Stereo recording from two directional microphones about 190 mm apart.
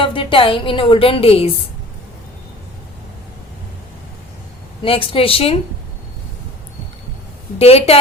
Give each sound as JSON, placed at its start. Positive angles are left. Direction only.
{"t": 0.0, "sound": "a woman's voice", "side_deg": 25}
{"t": 4.8, "sound": "a woman's voice", "side_deg": 30}
{"t": 7.6, "sound": "a woman's voice", "side_deg": 30}